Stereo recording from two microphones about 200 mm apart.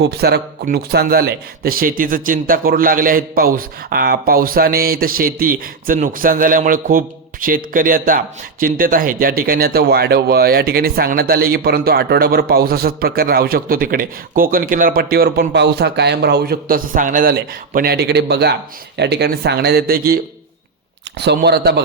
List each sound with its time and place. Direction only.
0.0 s speech: 55° right (ahead or behind)
21.2 s speech: 60° right (ahead or behind)